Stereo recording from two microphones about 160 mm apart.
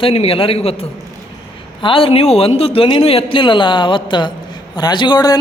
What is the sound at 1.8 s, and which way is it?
A man's voice, 35° left (ahead or behind).